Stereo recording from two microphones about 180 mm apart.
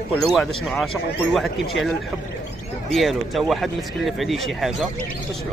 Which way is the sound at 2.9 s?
Centre (ahead or behind).